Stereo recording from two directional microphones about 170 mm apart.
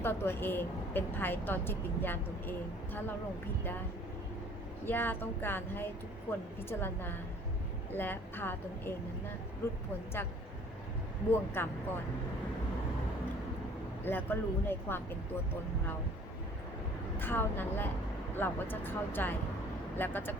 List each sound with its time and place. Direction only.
0.0 s a woman's voice: 15° left (ahead or behind)
4.9 s a woman's voice: 10° left (ahead or behind)
10.2 s a woman's voice: 10° left (ahead or behind)
14.0 s a woman's voice: 10° left (ahead or behind)
17.2 s a woman's voice: 10° left (ahead or behind)